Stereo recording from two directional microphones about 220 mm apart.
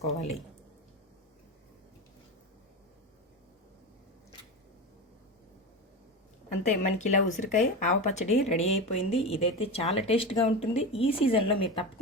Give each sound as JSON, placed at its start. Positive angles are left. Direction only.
{"t": 6.7, "sound": "speech", "side_deg": 35}